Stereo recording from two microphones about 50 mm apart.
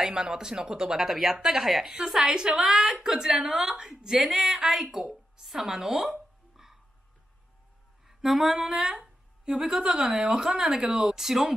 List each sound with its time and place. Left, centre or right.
0.0 s a woman's voice: centre
6.5 s telephone dialing: centre
8.1 s a woman's voice: centre